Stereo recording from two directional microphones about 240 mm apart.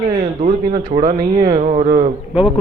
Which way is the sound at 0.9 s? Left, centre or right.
Right.